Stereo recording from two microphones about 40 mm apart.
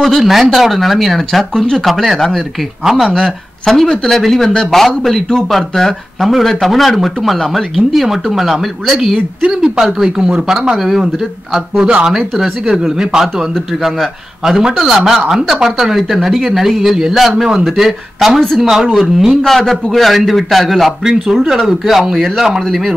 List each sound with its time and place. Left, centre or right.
0.0 s speech: centre
2.8 s speech: centre
3.2 s speech: centre
10.0 s speech: centre
11.8 s speech: right
14.8 s speech: centre
19.4 s speech: centre
21.0 s speech: centre